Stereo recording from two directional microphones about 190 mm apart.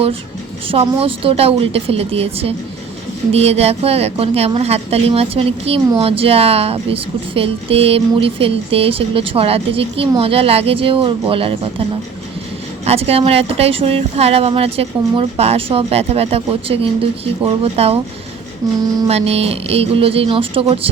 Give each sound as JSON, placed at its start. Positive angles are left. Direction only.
{"t": 0.7, "sound": "a woman's voice", "side_deg": -30}
{"t": 18.6, "sound": "a sound", "side_deg": -20}
{"t": 19.0, "sound": "a woman's voice", "side_deg": -30}